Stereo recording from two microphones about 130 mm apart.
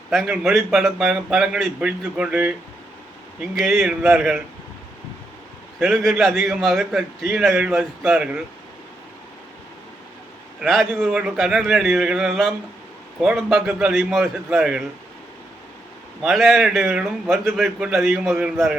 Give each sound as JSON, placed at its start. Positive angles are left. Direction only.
{"t": 0.1, "sound": "a man's voice", "side_deg": 0}
{"t": 3.5, "sound": "a man's voice", "side_deg": 0}
{"t": 5.9, "sound": "a man's voice", "side_deg": 0}
{"t": 10.6, "sound": "a man's voice", "side_deg": 5}
{"t": 16.2, "sound": "a man's voice", "side_deg": 0}